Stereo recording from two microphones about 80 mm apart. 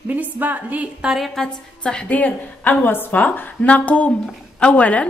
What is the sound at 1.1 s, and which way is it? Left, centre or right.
A woman's voice, centre.